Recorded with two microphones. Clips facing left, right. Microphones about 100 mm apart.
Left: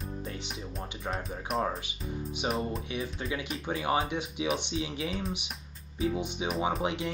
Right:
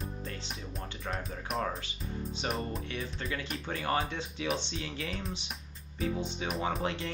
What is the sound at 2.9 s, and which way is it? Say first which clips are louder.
Speech: left 3 dB; 10° left (ahead or behind).